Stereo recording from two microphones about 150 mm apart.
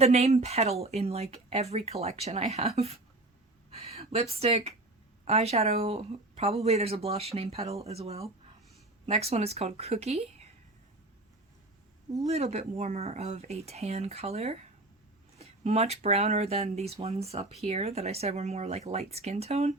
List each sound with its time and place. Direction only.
0.0 s speech: 45° right (ahead or behind)
3.7 s a sound: 45° right (ahead or behind)
5.2 s speech: 45° right (ahead or behind)
12.2 s speech: 45° right (ahead or behind)